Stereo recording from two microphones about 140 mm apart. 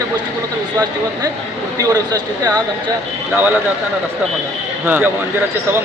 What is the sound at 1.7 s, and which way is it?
Speech, 25° right (ahead or behind).